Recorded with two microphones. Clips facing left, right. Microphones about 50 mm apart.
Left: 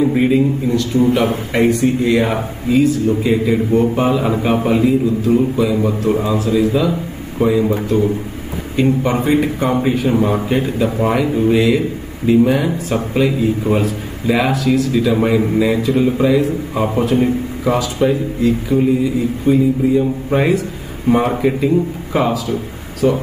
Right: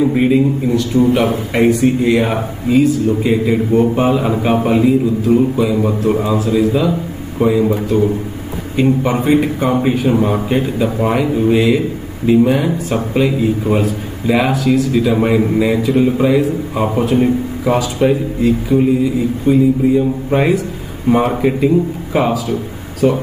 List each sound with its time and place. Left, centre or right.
0.0 s a man's voice: centre
17.6 s speech: right
18.7 s a man's voice: centre
23.0 s speech: right